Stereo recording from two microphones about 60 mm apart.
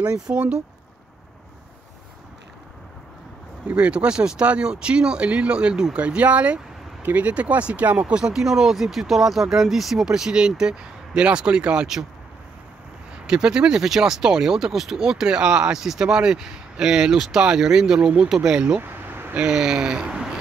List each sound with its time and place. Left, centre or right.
0.0 s speech: centre
3.6 s speech: centre
13.3 s speech: centre
18.8 s a sound: right
19.3 s speech: centre